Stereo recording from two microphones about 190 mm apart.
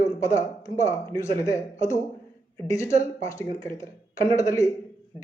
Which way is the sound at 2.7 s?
15° left (ahead or behind).